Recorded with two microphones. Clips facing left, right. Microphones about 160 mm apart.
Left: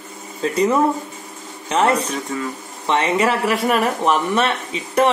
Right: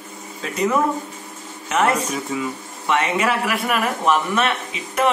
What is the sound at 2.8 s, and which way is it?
A man's voice, 30° left (ahead or behind).